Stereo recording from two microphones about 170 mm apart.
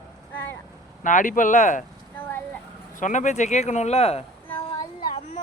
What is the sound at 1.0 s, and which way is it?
Speech, 50° left (ahead or behind).